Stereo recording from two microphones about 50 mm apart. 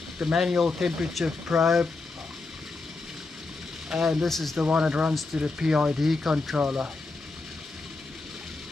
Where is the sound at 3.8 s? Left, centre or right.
Centre.